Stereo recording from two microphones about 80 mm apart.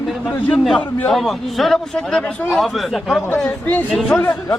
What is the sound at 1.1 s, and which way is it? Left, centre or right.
Speech, centre.